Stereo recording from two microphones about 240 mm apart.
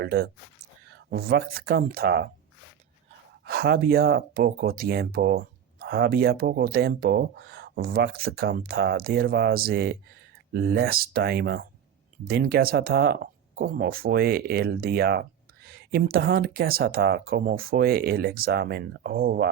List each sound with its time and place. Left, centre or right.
0.0 s speech: right
3.4 s speech: right